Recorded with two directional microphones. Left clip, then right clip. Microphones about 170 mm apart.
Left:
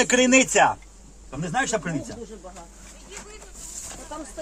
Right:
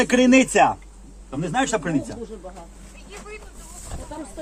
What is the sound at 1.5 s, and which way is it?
Speech, 15° right (ahead or behind).